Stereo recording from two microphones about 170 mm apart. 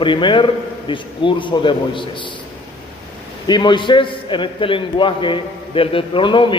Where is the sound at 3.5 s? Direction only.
25° left (ahead or behind).